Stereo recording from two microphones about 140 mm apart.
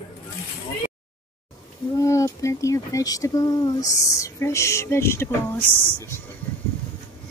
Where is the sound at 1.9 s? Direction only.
20° left (ahead or behind).